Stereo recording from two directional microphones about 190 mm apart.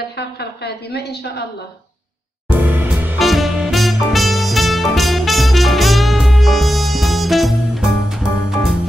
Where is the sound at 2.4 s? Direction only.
10° right (ahead or behind).